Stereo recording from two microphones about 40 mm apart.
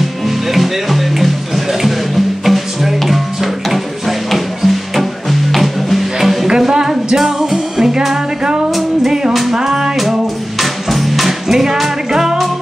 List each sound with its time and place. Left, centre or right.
0.5 s music: centre
9.6 s music: centre
10.6 s music: centre